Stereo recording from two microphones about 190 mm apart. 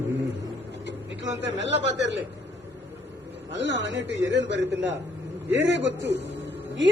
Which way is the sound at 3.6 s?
70° right (ahead or behind).